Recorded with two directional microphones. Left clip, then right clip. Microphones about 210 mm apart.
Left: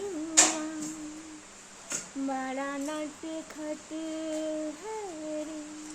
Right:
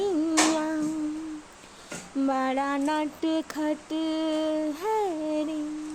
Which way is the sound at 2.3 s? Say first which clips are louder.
Right 7 dB; 45° right (ahead or behind).